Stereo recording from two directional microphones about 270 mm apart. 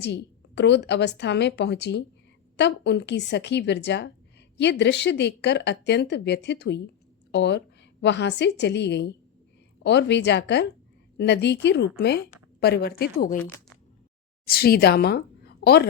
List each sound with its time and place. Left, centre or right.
0.0 s a woman's voice: left
14.4 s a woman's voice: left